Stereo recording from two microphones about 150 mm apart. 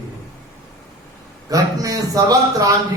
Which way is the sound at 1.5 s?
25° right (ahead or behind).